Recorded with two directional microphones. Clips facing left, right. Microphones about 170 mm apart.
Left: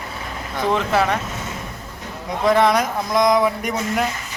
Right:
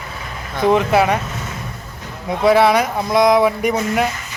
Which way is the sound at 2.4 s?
5° right (ahead or behind).